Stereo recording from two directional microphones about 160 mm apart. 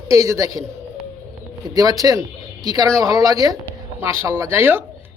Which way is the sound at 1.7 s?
25° right (ahead or behind).